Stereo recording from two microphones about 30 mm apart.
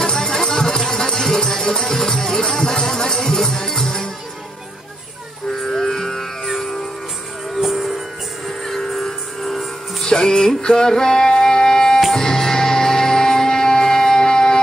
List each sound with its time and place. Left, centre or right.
0.0 s music: centre
5.7 s music: centre
7.6 s music: centre
8.5 s music: centre
10.0 s music: left